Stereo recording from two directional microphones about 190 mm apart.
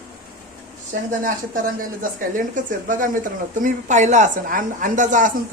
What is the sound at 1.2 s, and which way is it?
Speech, 45° right (ahead or behind).